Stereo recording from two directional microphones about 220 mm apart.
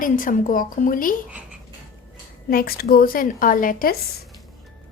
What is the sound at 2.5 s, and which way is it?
A woman's voice, 45° left (ahead or behind).